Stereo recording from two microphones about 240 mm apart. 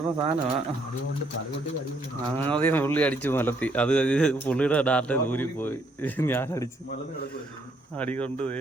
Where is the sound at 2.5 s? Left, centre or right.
Centre.